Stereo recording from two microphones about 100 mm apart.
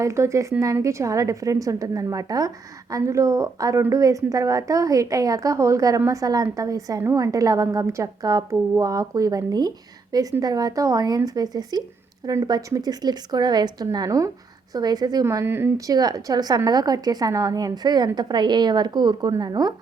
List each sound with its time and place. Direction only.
0.0 s a woman's voice: 30° right (ahead or behind)
15.9 s a woman's voice: 40° right (ahead or behind)